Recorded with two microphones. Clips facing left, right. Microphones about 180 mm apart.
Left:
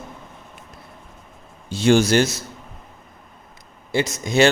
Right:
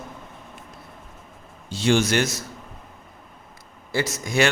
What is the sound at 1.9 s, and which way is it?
Speech, 35° left (ahead or behind).